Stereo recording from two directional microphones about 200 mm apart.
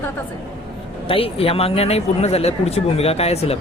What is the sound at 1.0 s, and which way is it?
Speech, 30° left (ahead or behind).